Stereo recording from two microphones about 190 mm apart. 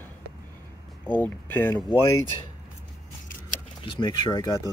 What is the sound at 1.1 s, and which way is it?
Speech, 10° left (ahead or behind).